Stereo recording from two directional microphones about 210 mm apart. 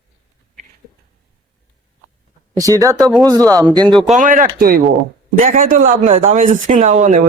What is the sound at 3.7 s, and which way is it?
Speech, 20° right (ahead or behind).